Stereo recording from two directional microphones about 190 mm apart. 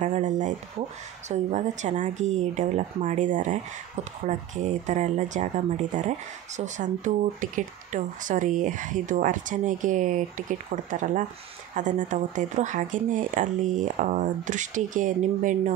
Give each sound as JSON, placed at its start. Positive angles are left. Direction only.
{"t": 0.0, "sound": "speech", "side_deg": -40}